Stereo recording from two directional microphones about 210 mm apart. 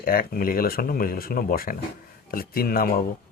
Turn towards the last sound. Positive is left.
turn(degrees=45)  # may be behind; listen again after turning